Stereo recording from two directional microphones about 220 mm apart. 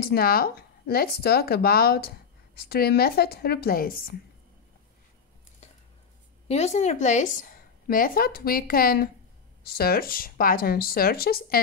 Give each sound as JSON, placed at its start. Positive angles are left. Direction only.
{"t": 0.0, "sound": "speech", "side_deg": 45}
{"t": 6.4, "sound": "a woman's voice", "side_deg": 30}